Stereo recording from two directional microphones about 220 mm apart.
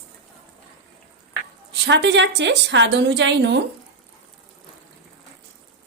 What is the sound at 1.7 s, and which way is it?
A woman's voice, 50° right (ahead or behind).